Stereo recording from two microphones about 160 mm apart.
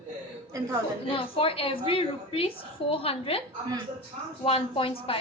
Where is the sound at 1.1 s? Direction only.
35° left (ahead or behind).